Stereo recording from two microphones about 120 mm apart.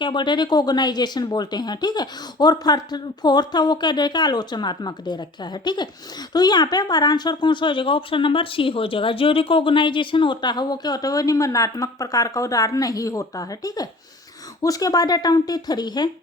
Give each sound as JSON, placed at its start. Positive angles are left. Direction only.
{"t": 0.0, "sound": "speech", "side_deg": 40}